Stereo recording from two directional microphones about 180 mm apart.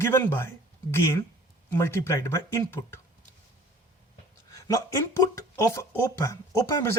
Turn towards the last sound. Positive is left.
turn(degrees=15)  # may be behind; listen again after turning